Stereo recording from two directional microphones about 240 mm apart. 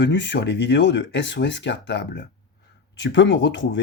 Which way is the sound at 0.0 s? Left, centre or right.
Left.